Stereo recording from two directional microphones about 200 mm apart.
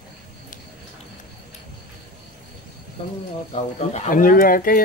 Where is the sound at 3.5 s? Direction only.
35° left (ahead or behind).